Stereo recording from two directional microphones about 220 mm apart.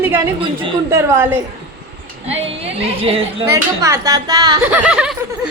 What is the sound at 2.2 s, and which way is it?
Speech, 30° right (ahead or behind).